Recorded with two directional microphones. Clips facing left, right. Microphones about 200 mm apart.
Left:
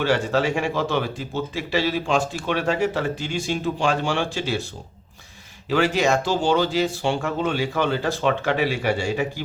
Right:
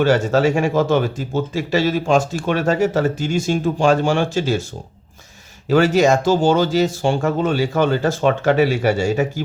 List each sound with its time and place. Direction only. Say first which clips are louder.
0.0 s speech: right 6 dB; 45° right (ahead or behind)
5.6 s speech: right 6 dB; 45° right (ahead or behind)